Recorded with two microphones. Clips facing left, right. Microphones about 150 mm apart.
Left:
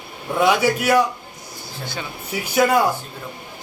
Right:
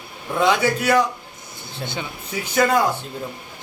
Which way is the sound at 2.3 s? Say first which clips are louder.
Left 1 dB; 10° left (ahead or behind).